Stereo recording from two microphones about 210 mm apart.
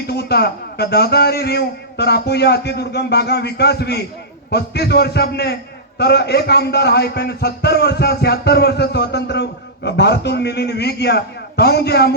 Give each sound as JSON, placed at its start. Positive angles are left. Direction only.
{"t": 0.1, "sound": "a man's voice", "side_deg": 50}